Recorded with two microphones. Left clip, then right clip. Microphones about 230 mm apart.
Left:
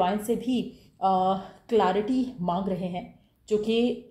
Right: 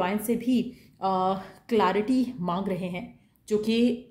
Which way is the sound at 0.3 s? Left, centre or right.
Right.